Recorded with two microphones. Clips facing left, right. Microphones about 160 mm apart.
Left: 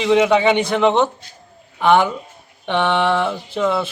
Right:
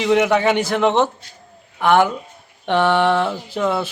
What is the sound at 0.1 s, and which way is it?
Speech, 15° left (ahead or behind).